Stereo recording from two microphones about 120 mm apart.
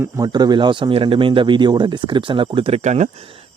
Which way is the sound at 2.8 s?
75° right (ahead or behind).